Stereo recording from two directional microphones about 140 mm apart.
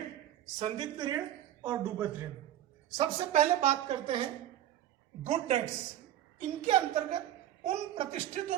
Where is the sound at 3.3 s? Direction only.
50° right (ahead or behind).